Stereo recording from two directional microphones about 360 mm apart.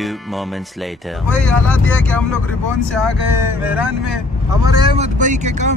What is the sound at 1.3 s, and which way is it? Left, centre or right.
Speech, centre.